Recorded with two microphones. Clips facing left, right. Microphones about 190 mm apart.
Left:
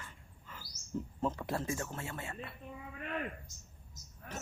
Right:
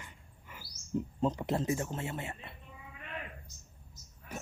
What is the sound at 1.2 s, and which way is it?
A man's voice, 20° right (ahead or behind).